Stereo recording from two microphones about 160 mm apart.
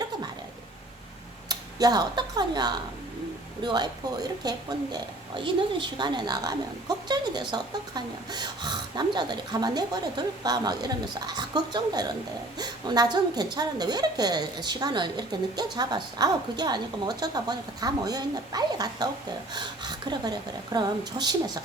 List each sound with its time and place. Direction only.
1.5 s a woman's voice: 25° right (ahead or behind)